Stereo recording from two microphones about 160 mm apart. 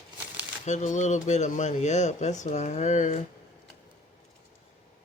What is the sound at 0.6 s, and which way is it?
Speech, 50° left (ahead or behind).